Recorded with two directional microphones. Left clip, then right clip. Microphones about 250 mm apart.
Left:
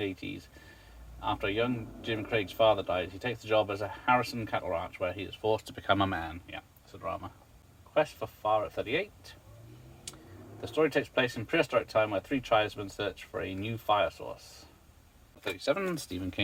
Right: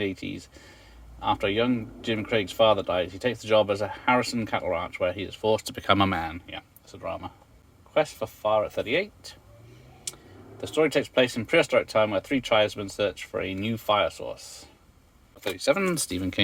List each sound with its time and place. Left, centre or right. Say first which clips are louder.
0.0 s speech: right 5 dB; right
7.9 s speech: right 4 dB; right
10.8 s speech: right 5 dB; right
15.4 s speech: right 6 dB; right